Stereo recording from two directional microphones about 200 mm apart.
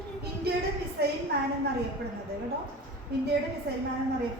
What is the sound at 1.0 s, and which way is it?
Speech, 50° right (ahead or behind).